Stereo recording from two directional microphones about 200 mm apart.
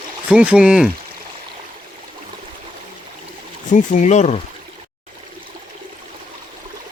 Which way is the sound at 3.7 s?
40° left (ahead or behind).